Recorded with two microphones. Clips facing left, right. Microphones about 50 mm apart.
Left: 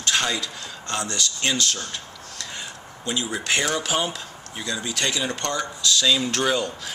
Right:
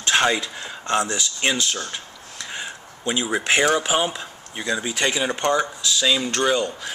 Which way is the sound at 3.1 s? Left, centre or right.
Right.